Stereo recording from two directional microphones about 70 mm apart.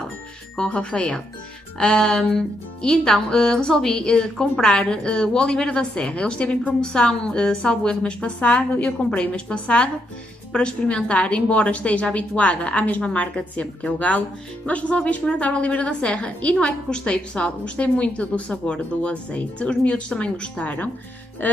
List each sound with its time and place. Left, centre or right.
0.6 s a woman's voice: centre